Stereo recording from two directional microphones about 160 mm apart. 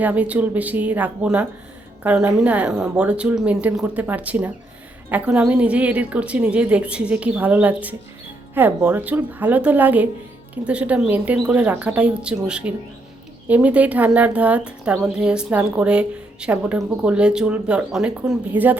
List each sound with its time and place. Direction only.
0.0 s a woman's voice: 10° right (ahead or behind)